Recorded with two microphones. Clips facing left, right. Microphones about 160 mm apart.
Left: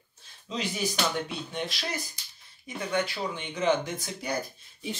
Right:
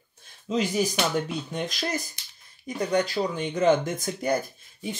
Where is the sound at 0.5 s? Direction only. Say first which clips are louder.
Right 7 dB; 45° right (ahead or behind).